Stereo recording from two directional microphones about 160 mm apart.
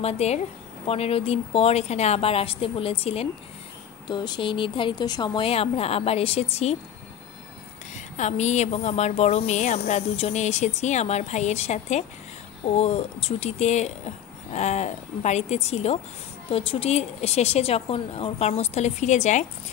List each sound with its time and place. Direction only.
0.0 s speech: 40° left (ahead or behind)
7.9 s speech: 45° left (ahead or behind)